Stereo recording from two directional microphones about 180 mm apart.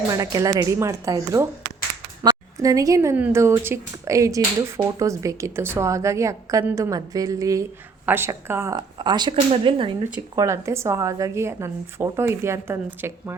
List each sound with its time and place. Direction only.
0.1 s speech: 20° right (ahead or behind)
10.3 s speech: 15° right (ahead or behind)